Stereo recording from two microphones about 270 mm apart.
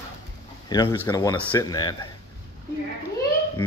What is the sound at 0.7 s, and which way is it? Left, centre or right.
Speech, centre.